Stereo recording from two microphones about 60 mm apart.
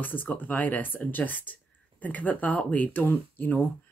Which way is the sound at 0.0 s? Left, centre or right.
Left.